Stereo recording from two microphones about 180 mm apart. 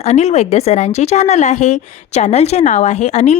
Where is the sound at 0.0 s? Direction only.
35° left (ahead or behind).